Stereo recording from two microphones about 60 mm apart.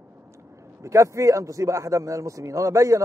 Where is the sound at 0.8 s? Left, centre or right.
Right.